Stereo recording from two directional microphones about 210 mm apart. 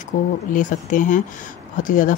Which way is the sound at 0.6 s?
40° left (ahead or behind).